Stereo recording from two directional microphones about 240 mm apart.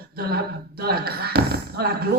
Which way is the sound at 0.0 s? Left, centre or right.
Right.